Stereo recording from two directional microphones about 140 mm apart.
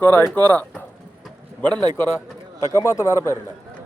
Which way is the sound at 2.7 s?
20° left (ahead or behind).